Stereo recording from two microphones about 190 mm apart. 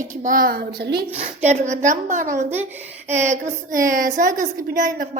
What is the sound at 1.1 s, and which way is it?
A woman's voice, 35° right (ahead or behind).